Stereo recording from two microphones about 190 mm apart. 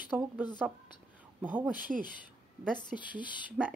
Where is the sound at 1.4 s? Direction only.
10° right (ahead or behind).